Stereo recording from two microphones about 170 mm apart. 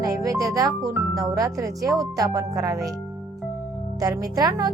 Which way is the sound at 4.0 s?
20° right (ahead or behind).